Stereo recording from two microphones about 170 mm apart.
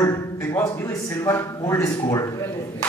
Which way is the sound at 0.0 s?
20° left (ahead or behind).